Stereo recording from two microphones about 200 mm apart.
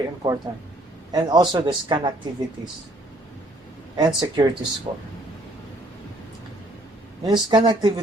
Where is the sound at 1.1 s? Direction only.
20° right (ahead or behind).